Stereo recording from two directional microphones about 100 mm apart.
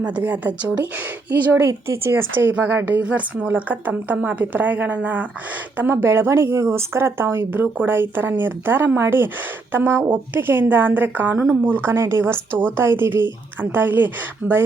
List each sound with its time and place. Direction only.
0.0 s a woman's voice: 15° right (ahead or behind)
1.6 s a woman's voice: 25° right (ahead or behind)